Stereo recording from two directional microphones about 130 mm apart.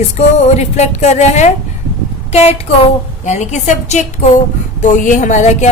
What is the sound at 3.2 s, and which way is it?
A woman's voice, 65° left (ahead or behind).